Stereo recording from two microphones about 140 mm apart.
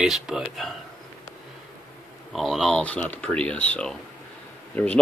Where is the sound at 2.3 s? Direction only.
Centre (ahead or behind).